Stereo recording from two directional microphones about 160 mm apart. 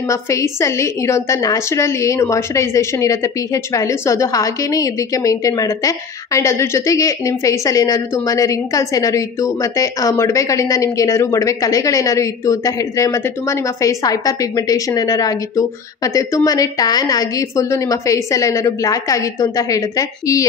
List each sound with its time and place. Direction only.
0.1 s a woman's voice: 20° left (ahead or behind)